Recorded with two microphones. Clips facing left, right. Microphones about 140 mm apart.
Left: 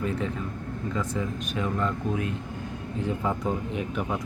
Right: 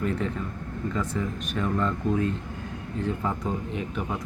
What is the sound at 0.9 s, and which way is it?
Speech, 10° left (ahead or behind).